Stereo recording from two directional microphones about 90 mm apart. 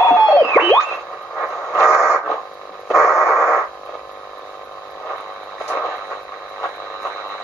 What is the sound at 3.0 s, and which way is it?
Radio, 35° left (ahead or behind).